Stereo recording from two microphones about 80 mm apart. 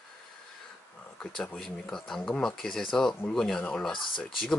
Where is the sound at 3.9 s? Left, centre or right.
Left.